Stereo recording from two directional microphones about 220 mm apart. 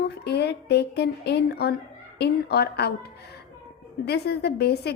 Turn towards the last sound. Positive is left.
turn(degrees=45)  # may be behind; listen again after turning